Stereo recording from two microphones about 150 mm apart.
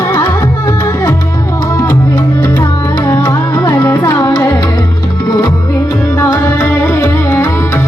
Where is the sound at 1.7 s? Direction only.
20° left (ahead or behind).